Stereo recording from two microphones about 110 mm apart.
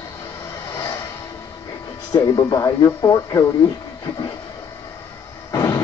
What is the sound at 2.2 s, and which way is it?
Speech, 25° left (ahead or behind).